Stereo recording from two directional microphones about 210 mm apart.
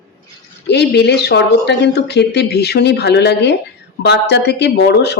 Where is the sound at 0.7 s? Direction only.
50° left (ahead or behind).